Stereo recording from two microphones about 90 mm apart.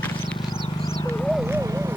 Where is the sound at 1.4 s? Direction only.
35° right (ahead or behind).